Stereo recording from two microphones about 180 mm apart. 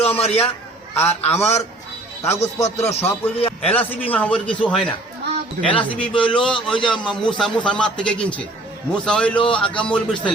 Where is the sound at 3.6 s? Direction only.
10° left (ahead or behind).